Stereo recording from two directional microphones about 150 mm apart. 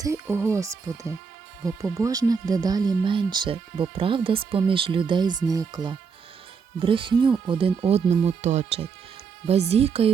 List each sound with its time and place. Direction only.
0.0 s speech: 20° right (ahead or behind); by 10.1 s 40° right (ahead or behind)